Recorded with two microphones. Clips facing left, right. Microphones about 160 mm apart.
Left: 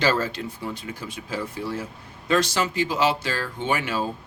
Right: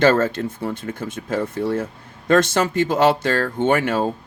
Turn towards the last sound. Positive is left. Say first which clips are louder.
# right 7 dB
turn(degrees=-55)  # may be behind; listen again after turning